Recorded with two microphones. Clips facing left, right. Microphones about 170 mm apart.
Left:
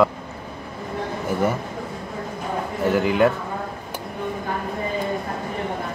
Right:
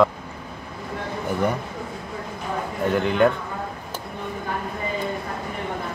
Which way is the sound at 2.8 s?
5° left (ahead or behind).